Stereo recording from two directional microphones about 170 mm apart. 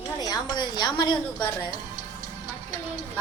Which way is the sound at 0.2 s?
25° left (ahead or behind).